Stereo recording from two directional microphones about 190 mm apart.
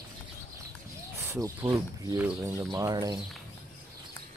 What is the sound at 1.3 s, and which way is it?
Speech, 15° right (ahead or behind).